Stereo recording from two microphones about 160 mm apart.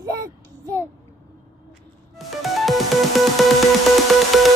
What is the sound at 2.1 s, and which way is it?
Music, centre (ahead or behind).